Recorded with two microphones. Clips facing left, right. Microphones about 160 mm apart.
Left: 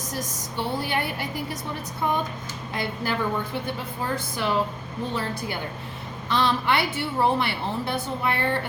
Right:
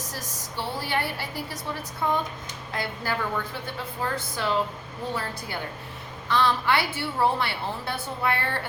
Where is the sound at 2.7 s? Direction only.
20° left (ahead or behind).